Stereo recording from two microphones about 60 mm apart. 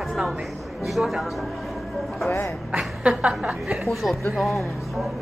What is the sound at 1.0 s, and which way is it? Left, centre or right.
Speech, centre.